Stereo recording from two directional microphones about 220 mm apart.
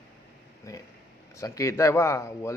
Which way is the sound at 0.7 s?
15° left (ahead or behind).